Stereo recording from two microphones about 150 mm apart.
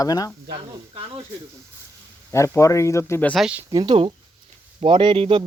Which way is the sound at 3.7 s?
30° right (ahead or behind).